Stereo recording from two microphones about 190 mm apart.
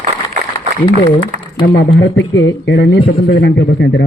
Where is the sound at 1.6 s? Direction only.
75° left (ahead or behind).